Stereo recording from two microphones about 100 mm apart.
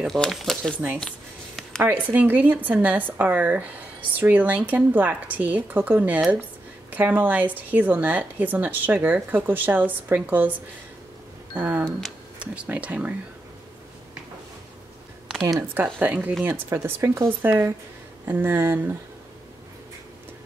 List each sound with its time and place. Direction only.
0.0 s speech: centre (ahead or behind)
0.7 s speech: 10° right (ahead or behind)
11.5 s speech: 15° right (ahead or behind)
15.7 s speech: 15° right (ahead or behind)